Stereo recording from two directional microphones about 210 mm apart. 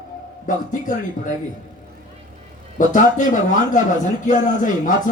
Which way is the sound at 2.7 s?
35° left (ahead or behind).